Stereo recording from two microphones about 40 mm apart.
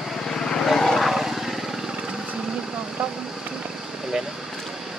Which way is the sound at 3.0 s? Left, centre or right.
Right.